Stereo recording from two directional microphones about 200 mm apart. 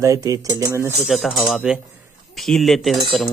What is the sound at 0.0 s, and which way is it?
Speech, 15° right (ahead or behind).